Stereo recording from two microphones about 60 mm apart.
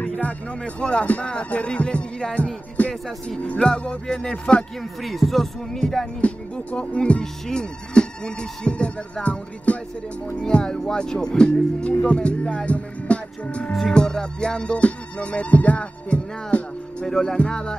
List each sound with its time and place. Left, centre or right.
0.0 s music: left
5.0 s speech: centre
6.2 s speech: centre
12.1 s music: centre
13.7 s speech: centre
17.0 s speech: centre